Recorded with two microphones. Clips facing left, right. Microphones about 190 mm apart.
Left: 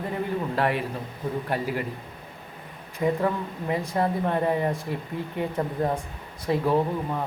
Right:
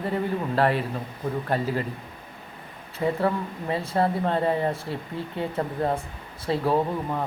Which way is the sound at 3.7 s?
15° left (ahead or behind).